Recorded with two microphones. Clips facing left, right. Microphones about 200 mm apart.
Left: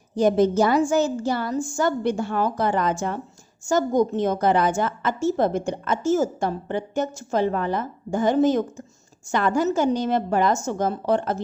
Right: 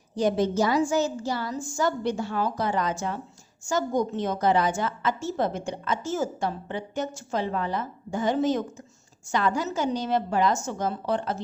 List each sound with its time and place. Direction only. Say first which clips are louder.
0.2 s a woman's voice: left 5 dB; 50° left (ahead or behind)